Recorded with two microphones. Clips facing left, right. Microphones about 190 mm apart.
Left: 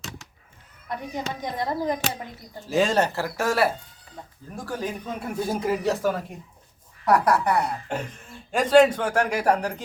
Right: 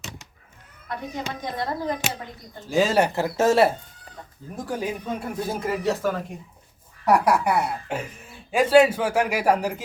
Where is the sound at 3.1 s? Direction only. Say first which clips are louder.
Right 5 dB; 20° right (ahead or behind).